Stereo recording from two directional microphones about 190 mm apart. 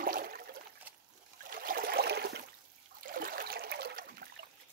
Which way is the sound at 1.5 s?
50° right (ahead or behind).